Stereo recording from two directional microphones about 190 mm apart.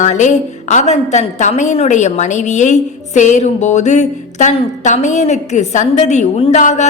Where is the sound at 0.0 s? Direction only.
40° left (ahead or behind).